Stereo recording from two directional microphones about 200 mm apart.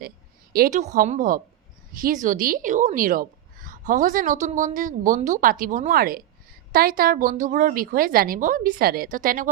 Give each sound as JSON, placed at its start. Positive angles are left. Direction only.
{"t": 0.5, "sound": "a woman's voice", "side_deg": -45}